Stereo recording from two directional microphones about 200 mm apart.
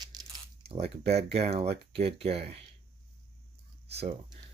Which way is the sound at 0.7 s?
30° right (ahead or behind).